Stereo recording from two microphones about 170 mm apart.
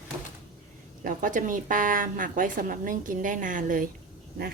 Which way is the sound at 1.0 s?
50° right (ahead or behind).